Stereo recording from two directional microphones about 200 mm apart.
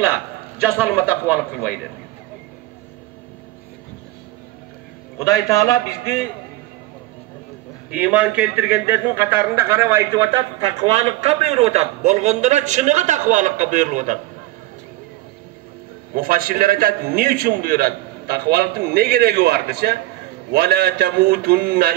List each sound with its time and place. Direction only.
0.0 s a man's voice: 10° right (ahead or behind)
5.2 s a man's voice: 15° left (ahead or behind)
7.9 s a man's voice: 5° right (ahead or behind)
10.9 s a man's voice: 30° right (ahead or behind)
16.2 s a man's voice: 50° right (ahead or behind)